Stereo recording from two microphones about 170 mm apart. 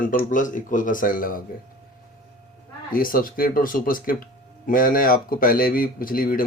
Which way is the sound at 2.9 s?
55° left (ahead or behind).